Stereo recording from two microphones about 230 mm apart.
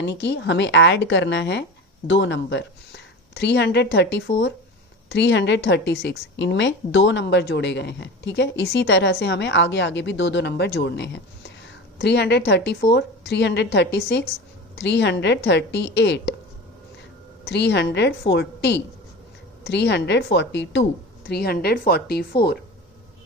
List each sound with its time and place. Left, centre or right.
0.1 s a woman's voice: left
17.4 s a woman's voice: left